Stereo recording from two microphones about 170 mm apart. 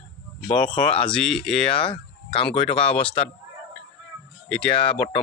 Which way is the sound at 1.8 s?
30° left (ahead or behind).